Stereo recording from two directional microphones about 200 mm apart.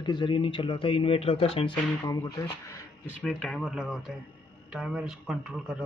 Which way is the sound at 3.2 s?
5° left (ahead or behind).